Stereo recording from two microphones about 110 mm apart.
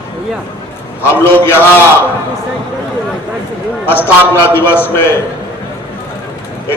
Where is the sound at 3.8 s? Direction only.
20° left (ahead or behind).